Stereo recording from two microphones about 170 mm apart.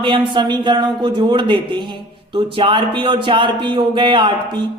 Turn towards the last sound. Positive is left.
turn(degrees=-25)  # may be behind; listen again after turning